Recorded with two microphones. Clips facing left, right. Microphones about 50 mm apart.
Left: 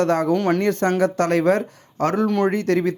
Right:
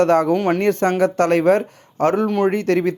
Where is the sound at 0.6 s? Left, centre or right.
Right.